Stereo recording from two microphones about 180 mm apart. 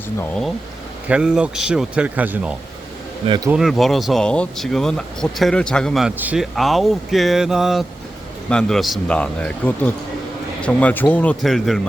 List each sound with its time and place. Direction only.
1.0 s speech: 5° right (ahead or behind)
3.2 s speech: 25° right (ahead or behind)
3.5 s speech: centre (ahead or behind)